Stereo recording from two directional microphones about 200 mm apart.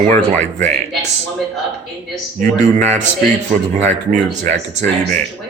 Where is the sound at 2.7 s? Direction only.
35° right (ahead or behind).